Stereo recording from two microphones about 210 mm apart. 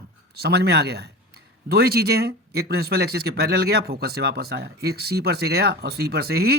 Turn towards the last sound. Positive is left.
turn(degrees=-50)  # may be behind; listen again after turning